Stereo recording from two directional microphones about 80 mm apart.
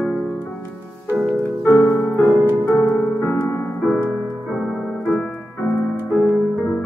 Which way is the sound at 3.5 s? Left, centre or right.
Left.